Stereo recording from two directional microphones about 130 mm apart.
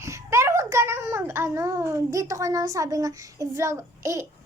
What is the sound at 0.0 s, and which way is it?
A child's voice, 20° right (ahead or behind).